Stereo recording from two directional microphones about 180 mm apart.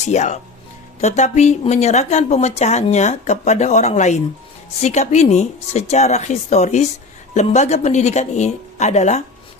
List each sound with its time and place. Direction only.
0.0 s speech: 40° left (ahead or behind)